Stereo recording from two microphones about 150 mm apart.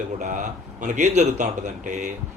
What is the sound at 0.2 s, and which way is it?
A man's voice, 55° right (ahead or behind).